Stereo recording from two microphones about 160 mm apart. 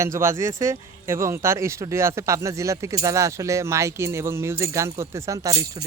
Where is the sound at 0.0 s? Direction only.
15° right (ahead or behind).